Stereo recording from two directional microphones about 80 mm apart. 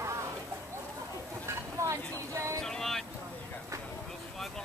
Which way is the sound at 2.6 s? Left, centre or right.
Centre.